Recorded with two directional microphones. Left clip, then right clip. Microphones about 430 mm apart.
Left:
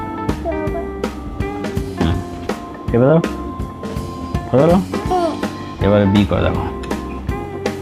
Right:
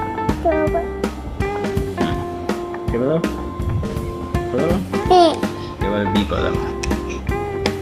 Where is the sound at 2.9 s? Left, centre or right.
Left.